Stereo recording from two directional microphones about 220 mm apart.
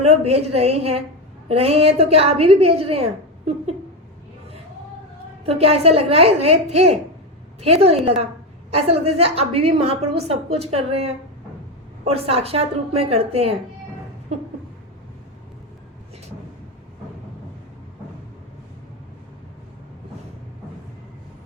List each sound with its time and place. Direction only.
0.0 s a woman's voice: 30° right (ahead or behind)
5.5 s a woman's voice: 25° right (ahead or behind)